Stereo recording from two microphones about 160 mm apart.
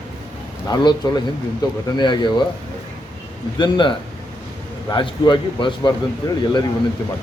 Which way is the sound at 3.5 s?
30° left (ahead or behind).